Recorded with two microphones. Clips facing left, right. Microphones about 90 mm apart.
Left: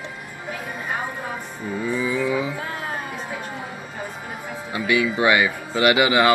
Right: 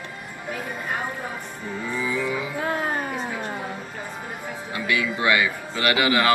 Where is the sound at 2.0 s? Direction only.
20° left (ahead or behind).